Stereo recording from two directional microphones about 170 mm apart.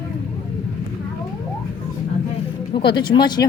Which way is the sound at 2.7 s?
25° left (ahead or behind).